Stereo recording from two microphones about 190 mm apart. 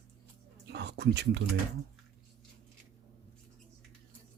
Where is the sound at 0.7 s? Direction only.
60° right (ahead or behind).